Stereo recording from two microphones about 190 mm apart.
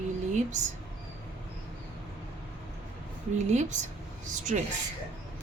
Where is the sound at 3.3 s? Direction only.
40° right (ahead or behind).